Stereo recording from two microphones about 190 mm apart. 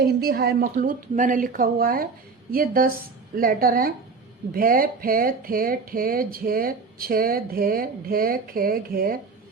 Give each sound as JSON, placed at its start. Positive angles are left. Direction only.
{"t": 0.0, "sound": "a woman's voice", "side_deg": -55}
{"t": 0.6, "sound": "speech", "side_deg": -45}